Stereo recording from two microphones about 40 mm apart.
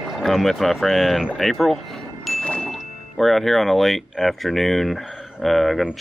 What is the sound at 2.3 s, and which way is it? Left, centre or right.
Music, left.